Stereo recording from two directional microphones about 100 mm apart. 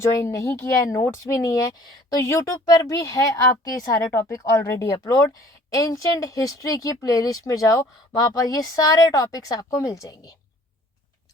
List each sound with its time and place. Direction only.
0.3 s speech: 30° left (ahead or behind)